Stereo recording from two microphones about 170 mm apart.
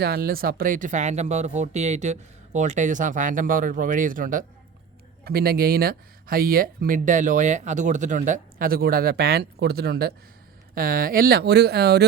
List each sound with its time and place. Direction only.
0.0 s speech: 65° right (ahead or behind)
5.2 s speech: 65° right (ahead or behind)